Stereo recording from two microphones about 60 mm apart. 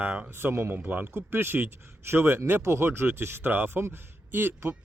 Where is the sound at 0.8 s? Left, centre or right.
Right.